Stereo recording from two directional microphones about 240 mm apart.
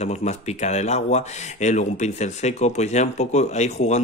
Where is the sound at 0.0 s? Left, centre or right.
Left.